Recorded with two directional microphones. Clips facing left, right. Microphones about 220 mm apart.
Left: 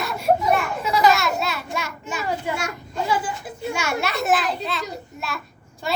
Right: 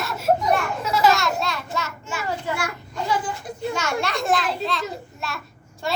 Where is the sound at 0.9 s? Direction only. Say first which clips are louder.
Left 1 dB; centre (ahead or behind); by 2.7 s 20° left (ahead or behind).